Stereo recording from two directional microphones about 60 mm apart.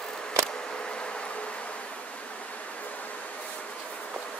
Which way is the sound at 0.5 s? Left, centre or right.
Centre.